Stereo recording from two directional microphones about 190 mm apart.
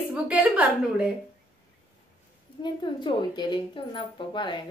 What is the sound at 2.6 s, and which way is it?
A woman's voice, 25° left (ahead or behind).